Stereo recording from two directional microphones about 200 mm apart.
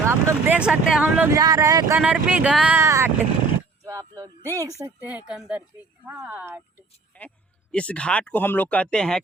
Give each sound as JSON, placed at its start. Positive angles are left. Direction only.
{"t": 0.0, "sound": "speech", "side_deg": -15}
{"t": 2.0, "sound": "speech", "side_deg": -5}
{"t": 7.1, "sound": "speech", "side_deg": 5}